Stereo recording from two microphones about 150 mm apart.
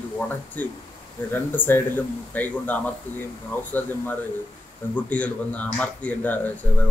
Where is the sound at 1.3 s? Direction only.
10° left (ahead or behind).